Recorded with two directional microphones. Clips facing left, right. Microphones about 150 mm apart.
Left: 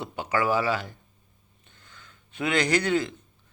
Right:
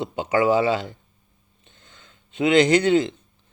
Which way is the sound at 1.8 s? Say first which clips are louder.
Even; 25° right (ahead or behind).